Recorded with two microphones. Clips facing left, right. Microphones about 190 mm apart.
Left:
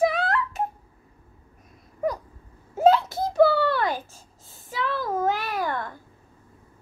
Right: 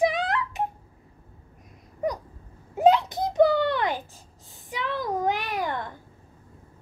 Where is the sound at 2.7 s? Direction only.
15° right (ahead or behind).